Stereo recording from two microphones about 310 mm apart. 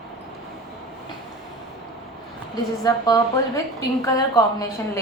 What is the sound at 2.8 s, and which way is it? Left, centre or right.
A woman's voice, centre.